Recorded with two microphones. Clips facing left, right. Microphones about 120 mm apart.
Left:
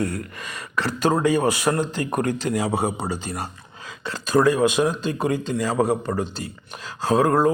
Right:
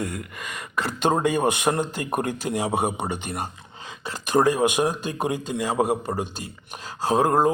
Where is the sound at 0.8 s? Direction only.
15° right (ahead or behind).